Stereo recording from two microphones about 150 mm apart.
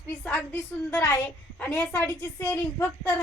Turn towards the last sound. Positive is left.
turn(degrees=15)  # may be behind; listen again after turning